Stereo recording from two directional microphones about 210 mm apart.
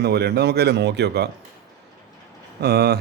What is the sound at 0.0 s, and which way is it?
Speech, 50° right (ahead or behind).